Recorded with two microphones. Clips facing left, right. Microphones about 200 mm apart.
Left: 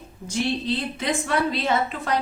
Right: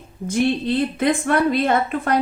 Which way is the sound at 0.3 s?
55° right (ahead or behind).